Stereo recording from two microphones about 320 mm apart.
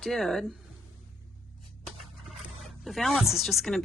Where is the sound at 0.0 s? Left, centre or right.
Centre.